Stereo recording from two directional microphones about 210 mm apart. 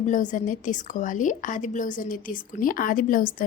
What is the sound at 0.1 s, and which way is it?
A woman's voice, 35° left (ahead or behind).